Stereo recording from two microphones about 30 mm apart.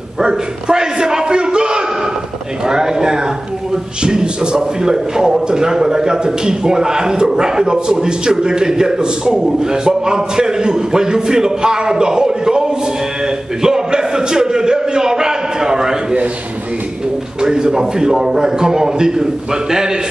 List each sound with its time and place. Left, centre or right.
0.2 s a sound: right
2.6 s a man's voice: right
17.4 s a man's voice: right